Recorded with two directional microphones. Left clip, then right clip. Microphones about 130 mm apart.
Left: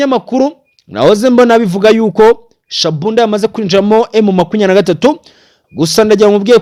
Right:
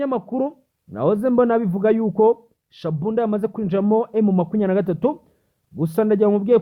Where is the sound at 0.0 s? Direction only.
30° left (ahead or behind).